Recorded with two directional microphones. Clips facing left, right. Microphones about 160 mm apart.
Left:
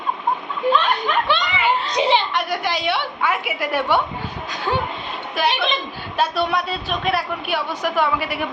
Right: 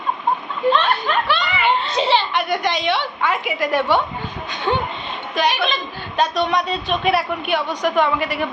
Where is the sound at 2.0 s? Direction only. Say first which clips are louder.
Left 1 dB; 15° left (ahead or behind).